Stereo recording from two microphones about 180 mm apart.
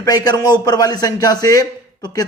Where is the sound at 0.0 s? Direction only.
20° left (ahead or behind).